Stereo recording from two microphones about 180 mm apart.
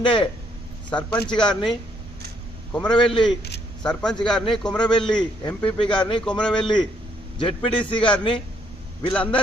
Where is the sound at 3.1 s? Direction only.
25° left (ahead or behind).